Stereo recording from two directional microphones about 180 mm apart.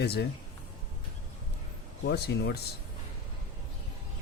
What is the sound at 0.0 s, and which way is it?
Speech, 65° left (ahead or behind).